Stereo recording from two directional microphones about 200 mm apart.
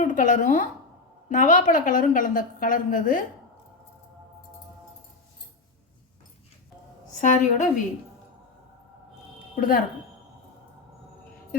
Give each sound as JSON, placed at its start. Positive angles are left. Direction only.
{"t": 0.0, "sound": "a woman's voice", "side_deg": 40}
{"t": 7.2, "sound": "a woman's voice", "side_deg": 40}
{"t": 9.6, "sound": "speech", "side_deg": 45}